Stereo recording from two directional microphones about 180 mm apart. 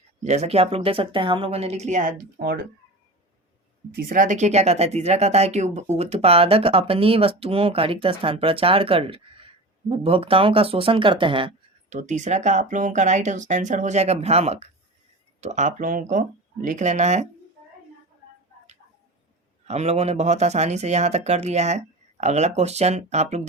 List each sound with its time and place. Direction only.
0.3 s speech: 35° right (ahead or behind); by 2.6 s 55° right (ahead or behind)
3.9 s speech: 50° right (ahead or behind); by 11.5 s 30° right (ahead or behind)
11.9 s speech: 40° right (ahead or behind)
19.6 s speech: 35° right (ahead or behind)